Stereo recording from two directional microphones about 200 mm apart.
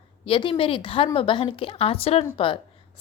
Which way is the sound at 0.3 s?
25° left (ahead or behind).